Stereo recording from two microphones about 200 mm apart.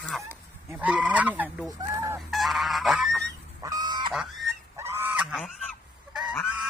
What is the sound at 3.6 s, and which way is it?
Goose, 20° right (ahead or behind).